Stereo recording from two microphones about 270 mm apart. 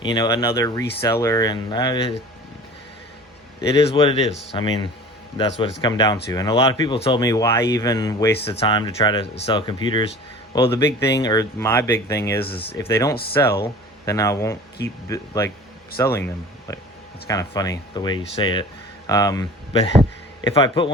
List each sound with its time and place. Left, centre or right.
0.0 s speech: centre
3.8 s speech: centre
12.4 s speech: left
12.7 s speech: centre